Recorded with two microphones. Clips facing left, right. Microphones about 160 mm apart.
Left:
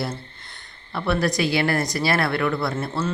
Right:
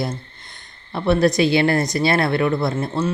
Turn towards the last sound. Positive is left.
turn(degrees=-20)  # may be behind; listen again after turning